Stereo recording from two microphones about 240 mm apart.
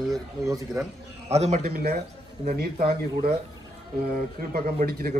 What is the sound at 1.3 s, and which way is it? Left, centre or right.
A man's voice, right.